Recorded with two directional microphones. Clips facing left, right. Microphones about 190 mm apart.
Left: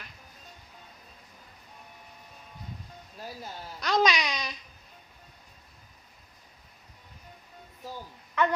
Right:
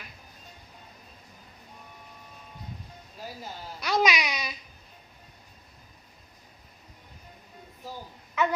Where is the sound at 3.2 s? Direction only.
5° right (ahead or behind).